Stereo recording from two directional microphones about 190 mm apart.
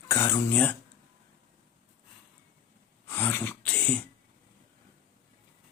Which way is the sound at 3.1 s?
10° left (ahead or behind).